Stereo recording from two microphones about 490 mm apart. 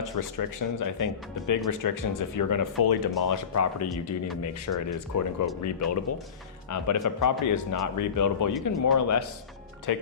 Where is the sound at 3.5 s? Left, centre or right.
Left.